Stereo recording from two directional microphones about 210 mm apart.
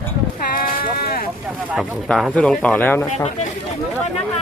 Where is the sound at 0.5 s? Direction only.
45° left (ahead or behind).